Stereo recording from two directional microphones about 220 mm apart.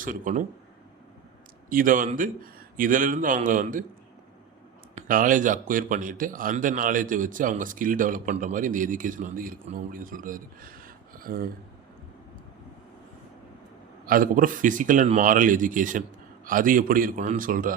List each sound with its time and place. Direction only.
0.0 s a man's voice: 35° right (ahead or behind)
1.7 s a man's voice: 40° right (ahead or behind)
4.9 s a man's voice: 40° right (ahead or behind)
14.0 s a man's voice: 40° right (ahead or behind)